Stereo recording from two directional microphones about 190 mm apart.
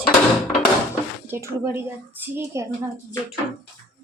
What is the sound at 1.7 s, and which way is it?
Speech, 10° right (ahead or behind).